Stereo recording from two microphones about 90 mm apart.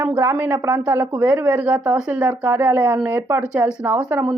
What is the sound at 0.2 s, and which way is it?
A woman's voice, 25° right (ahead or behind).